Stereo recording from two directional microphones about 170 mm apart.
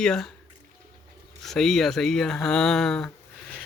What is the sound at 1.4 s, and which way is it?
Speech, centre (ahead or behind).